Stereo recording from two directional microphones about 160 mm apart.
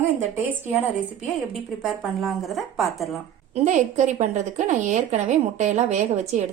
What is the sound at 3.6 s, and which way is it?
A woman's voice, 50° right (ahead or behind).